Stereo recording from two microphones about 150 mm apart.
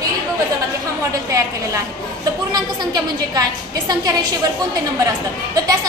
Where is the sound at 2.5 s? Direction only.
25° right (ahead or behind).